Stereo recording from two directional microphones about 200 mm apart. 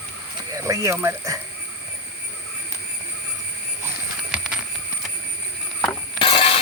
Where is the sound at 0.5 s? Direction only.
15° right (ahead or behind).